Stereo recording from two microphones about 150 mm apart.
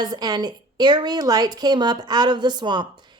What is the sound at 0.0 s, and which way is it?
A woman's voice, 25° right (ahead or behind).